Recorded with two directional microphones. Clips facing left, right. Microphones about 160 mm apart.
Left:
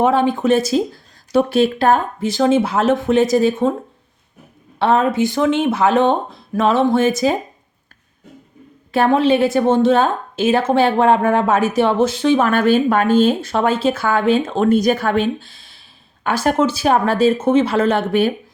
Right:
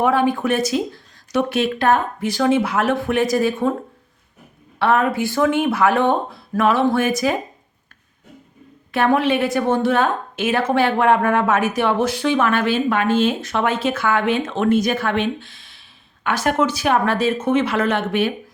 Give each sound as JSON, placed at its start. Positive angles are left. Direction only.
{"t": 0.0, "sound": "a woman's voice", "side_deg": 25}
{"t": 4.8, "sound": "a woman's voice", "side_deg": 25}
{"t": 8.9, "sound": "a woman's voice", "side_deg": 30}
{"t": 12.5, "sound": "speech", "side_deg": 40}